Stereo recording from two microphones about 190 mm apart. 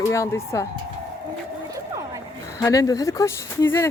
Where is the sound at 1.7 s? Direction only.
15° right (ahead or behind).